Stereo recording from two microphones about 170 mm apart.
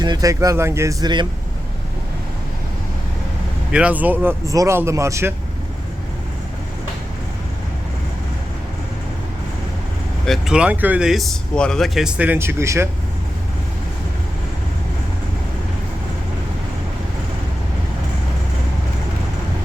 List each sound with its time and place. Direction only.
0.0 s speech: 20° right (ahead or behind)
3.7 s speech: 5° right (ahead or behind)
10.2 s speech: centre (ahead or behind); by 12.9 s 15° right (ahead or behind)